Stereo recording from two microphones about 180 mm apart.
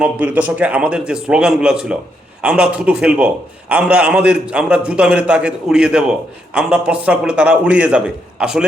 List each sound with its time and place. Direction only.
0.0 s a man's voice: 10° right (ahead or behind)